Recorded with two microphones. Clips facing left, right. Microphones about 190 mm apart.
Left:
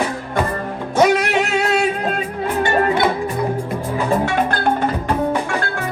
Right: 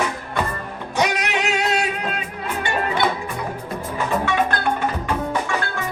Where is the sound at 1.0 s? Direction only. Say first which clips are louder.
Left 7 dB; 40° left (ahead or behind).